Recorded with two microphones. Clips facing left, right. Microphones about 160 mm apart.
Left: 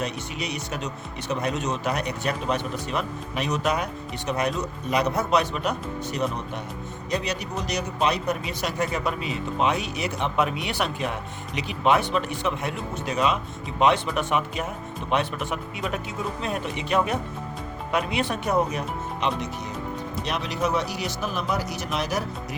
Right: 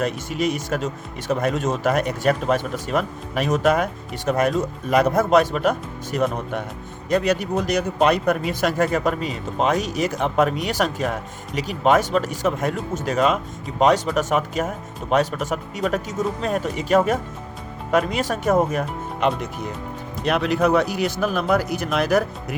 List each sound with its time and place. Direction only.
0.0 s speech: 45° right (ahead or behind)